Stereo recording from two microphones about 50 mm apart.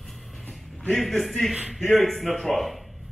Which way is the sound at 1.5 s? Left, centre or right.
Centre.